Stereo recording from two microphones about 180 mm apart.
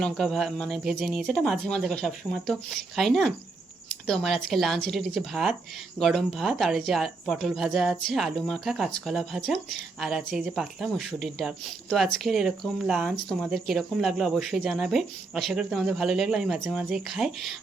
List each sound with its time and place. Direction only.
0.0 s speech: centre (ahead or behind)